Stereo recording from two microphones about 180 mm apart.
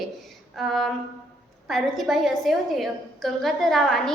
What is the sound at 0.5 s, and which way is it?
A woman's voice, centre (ahead or behind).